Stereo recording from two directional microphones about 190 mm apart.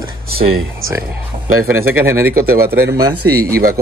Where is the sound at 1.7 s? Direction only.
15° right (ahead or behind).